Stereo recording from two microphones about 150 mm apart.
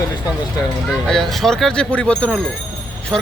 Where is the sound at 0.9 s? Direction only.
Centre (ahead or behind).